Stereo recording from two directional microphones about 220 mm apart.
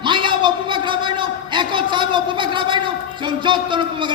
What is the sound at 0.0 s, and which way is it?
A man's voice, 20° right (ahead or behind).